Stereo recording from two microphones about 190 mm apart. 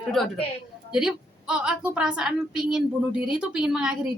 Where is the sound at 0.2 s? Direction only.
Centre (ahead or behind).